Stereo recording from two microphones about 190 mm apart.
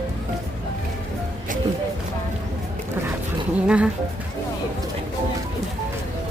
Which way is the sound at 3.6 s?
5° right (ahead or behind).